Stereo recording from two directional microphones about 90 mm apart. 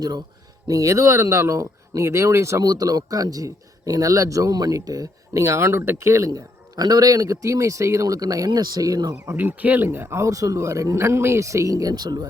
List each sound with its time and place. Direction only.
0.7 s a man's voice: 35° right (ahead or behind)
9.3 s a man's voice: 20° right (ahead or behind); by 12.3 s 50° right (ahead or behind)